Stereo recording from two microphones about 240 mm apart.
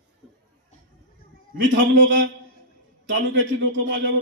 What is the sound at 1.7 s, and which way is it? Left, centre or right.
A man's voice, right.